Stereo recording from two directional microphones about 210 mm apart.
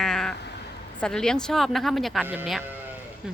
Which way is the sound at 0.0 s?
Centre (ahead or behind).